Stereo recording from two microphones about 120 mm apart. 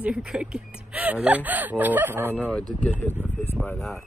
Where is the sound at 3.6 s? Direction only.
15° left (ahead or behind).